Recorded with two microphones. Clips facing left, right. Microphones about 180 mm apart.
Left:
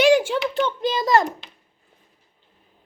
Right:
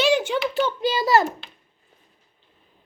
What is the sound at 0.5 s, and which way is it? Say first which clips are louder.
Speech: even; 5° right (ahead or behind).